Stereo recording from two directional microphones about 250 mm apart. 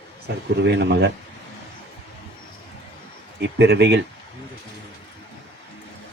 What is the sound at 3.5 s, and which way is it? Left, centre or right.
Speech, right.